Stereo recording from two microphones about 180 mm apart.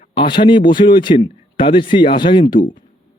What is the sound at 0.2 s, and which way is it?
Speech, 25° left (ahead or behind).